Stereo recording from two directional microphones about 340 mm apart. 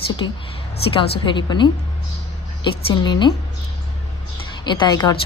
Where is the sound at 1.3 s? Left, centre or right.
Centre.